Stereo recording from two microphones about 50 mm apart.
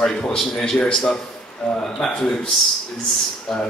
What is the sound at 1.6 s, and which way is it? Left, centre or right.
Speech, left.